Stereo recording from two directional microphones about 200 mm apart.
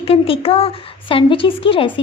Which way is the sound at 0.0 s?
30° left (ahead or behind).